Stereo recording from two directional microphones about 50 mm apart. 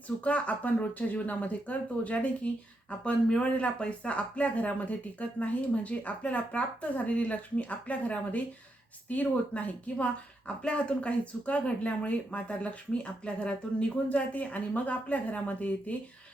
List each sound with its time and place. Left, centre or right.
0.3 s speech: left